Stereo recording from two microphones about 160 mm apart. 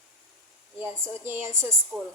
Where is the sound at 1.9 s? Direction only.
Centre (ahead or behind).